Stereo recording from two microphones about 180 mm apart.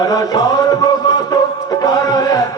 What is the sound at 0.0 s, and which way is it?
Music, 20° left (ahead or behind).